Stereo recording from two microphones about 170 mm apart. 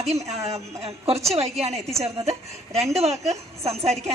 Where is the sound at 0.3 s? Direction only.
40° right (ahead or behind).